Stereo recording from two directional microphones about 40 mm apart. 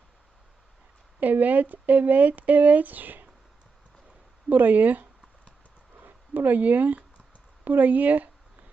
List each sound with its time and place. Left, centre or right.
1.2 s speech: right
4.4 s speech: right